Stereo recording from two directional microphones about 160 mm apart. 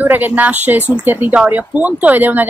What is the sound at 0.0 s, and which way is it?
Speech, 10° right (ahead or behind).